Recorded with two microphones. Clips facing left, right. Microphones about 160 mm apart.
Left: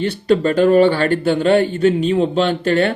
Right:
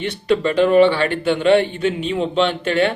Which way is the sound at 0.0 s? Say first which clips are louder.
Left 3 dB; 40° left (ahead or behind).